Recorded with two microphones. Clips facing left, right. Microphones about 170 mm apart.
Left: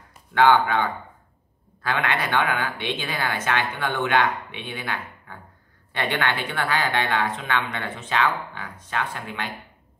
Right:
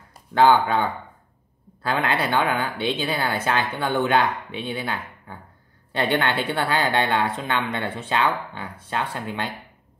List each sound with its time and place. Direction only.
0.1 s a woman's voice: 35° right (ahead or behind)